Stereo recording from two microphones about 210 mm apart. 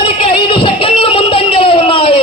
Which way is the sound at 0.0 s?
25° left (ahead or behind).